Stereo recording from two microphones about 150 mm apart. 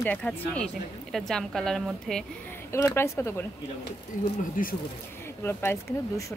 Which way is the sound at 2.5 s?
20° left (ahead or behind).